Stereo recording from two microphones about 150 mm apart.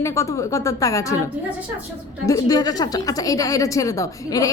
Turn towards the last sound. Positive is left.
turn(degrees=25)  # may be behind; listen again after turning